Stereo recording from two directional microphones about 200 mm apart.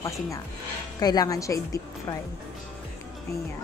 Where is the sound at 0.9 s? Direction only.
20° left (ahead or behind).